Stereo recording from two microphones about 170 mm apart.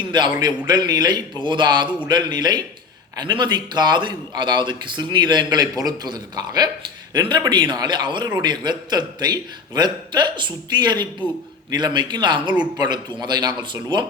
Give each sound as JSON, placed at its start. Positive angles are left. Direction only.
{"t": 0.1, "sound": "a man's voice", "side_deg": -25}